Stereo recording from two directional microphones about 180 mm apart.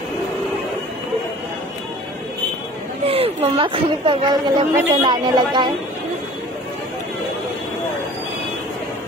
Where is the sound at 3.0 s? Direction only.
35° right (ahead or behind).